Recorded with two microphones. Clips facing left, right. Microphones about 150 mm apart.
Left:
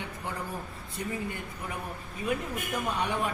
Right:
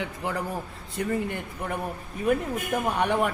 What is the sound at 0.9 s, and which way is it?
Speech, 70° right (ahead or behind).